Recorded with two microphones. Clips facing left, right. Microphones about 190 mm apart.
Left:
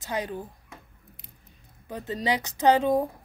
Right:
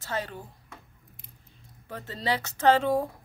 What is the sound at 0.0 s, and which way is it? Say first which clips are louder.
Speech: left 2 dB; 15° left (ahead or behind).